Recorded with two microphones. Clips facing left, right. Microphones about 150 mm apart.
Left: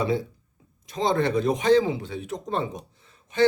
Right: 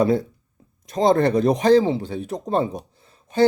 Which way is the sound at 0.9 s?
40° right (ahead or behind).